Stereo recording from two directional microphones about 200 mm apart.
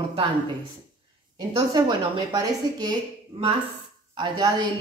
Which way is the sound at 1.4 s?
20° right (ahead or behind).